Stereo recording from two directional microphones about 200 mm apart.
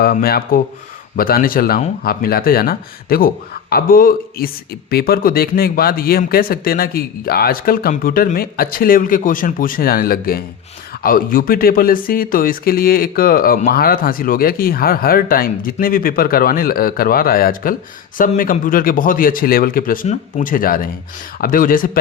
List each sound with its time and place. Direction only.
0.0 s speech: 50° left (ahead or behind)